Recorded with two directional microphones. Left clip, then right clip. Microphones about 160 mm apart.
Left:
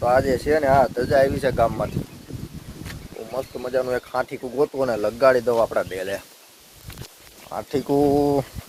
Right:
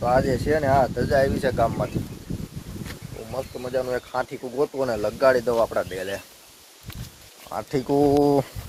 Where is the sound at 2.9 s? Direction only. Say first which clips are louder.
Left 4 dB; 25° left (ahead or behind).